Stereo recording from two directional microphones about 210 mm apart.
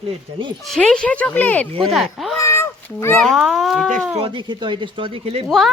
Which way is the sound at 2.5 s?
10° left (ahead or behind).